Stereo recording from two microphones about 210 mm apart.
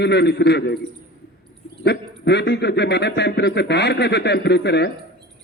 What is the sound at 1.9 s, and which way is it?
A man's voice, 55° left (ahead or behind).